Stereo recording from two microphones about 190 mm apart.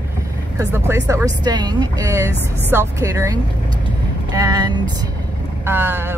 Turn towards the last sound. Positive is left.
turn(degrees=-10)  # may be behind; listen again after turning